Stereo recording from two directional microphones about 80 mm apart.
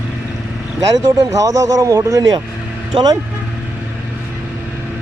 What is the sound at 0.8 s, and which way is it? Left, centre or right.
Speech, right.